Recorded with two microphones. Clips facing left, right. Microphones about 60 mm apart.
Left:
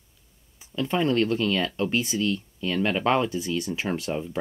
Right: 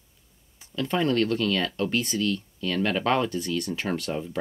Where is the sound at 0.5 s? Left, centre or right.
Centre.